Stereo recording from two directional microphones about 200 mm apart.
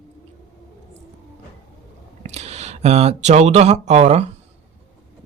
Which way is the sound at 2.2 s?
35° right (ahead or behind).